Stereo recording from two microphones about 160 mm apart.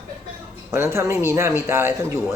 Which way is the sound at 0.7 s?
15° right (ahead or behind).